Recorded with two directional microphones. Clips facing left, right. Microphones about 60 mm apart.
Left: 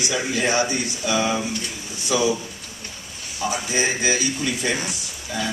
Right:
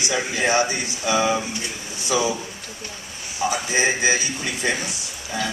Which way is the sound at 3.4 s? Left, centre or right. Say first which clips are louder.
Right 2 dB; right.